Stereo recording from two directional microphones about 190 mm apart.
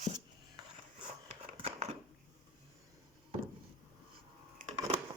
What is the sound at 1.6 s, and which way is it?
Scissors, 30° right (ahead or behind).